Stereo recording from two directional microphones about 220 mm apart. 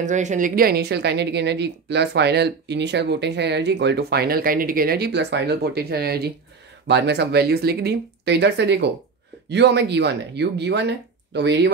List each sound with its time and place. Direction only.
0.0 s speech: 35° right (ahead or behind); by 11.7 s 50° right (ahead or behind)